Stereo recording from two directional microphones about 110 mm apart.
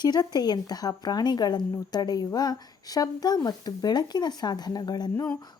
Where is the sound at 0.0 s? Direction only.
40° left (ahead or behind).